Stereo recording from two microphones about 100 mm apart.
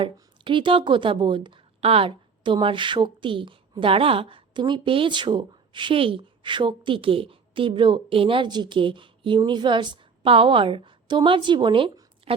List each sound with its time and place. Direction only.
0.0 s a woman's voice: 55° right (ahead or behind)
1.8 s a woman's voice: 75° right (ahead or behind); by 11.9 s 55° right (ahead or behind)